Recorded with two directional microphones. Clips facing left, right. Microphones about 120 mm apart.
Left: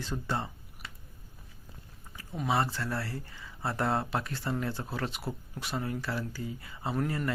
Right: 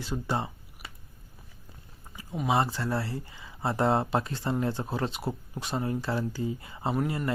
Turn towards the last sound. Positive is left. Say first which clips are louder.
# right 2 dB
turn(degrees=-10)  # may be behind; listen again after turning